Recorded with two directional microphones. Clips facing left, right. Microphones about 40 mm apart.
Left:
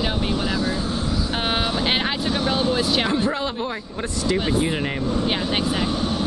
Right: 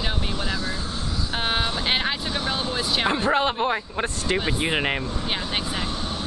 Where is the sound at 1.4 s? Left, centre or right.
Centre.